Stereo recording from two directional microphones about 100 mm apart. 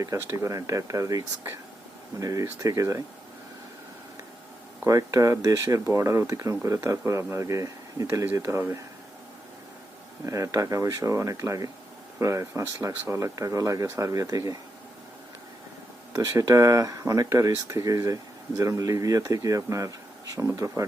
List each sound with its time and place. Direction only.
0.0 s speech: 30° right (ahead or behind)
4.9 s speech: 35° right (ahead or behind)
10.2 s speech: 30° right (ahead or behind)
16.1 s speech: 35° right (ahead or behind)